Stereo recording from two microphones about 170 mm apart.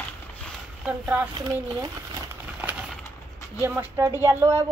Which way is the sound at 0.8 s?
10° right (ahead or behind).